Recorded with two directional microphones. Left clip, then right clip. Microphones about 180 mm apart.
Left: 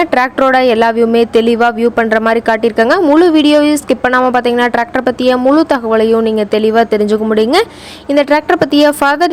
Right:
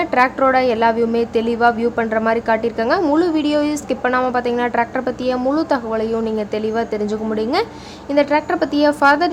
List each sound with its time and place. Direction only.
0.0 s speech: 35° left (ahead or behind)